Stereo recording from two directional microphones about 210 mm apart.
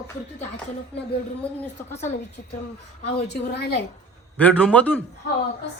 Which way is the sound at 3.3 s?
50° left (ahead or behind).